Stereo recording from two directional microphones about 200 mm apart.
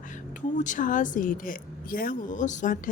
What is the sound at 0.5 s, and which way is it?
Speech, 40° left (ahead or behind).